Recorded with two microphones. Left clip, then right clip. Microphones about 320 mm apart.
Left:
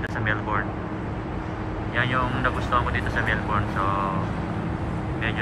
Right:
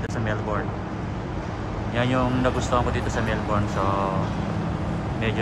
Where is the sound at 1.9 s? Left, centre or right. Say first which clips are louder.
Even; right.